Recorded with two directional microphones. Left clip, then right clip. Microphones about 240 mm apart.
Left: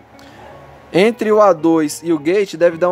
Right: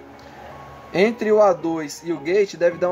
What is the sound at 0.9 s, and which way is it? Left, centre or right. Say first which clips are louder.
Speech: left 5 dB; left.